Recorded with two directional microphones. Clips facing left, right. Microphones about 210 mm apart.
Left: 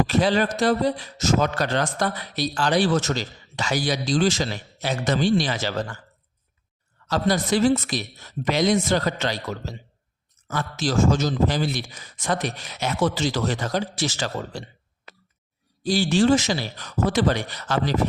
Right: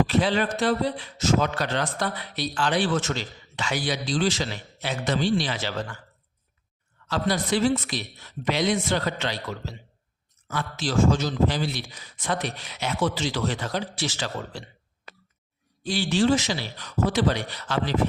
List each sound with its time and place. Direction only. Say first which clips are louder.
0.1 s a man's voice: left 2 dB; 40° left (ahead or behind)
7.1 s a man's voice: left 3 dB; 45° left (ahead or behind)
15.8 s a man's voice: left 3 dB; 40° left (ahead or behind)